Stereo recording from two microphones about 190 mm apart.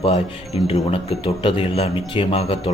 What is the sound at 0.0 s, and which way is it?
A man's voice, 30° left (ahead or behind).